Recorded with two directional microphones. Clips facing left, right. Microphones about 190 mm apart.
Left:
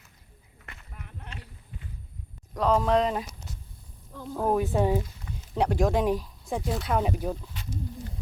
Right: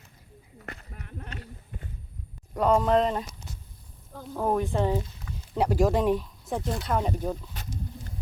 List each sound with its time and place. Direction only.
0.6 s a sound: 40° right (ahead or behind)
2.6 s speech: 5° right (ahead or behind)
4.4 s speech: 5° left (ahead or behind)
5.5 s speech: 5° right (ahead or behind)